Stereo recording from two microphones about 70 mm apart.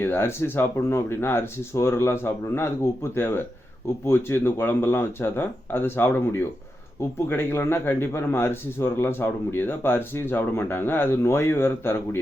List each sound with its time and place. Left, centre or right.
0.0 s a man's voice: left